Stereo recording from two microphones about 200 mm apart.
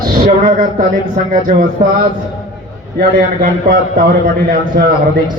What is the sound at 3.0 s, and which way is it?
A man's voice, 45° right (ahead or behind).